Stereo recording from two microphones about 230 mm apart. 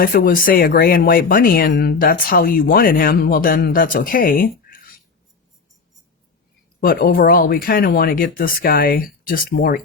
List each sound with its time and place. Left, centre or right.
0.0 s speech: left
6.7 s speech: left